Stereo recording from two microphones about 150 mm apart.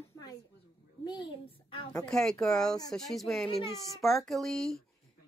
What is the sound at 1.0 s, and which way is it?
Speech, 30° left (ahead or behind).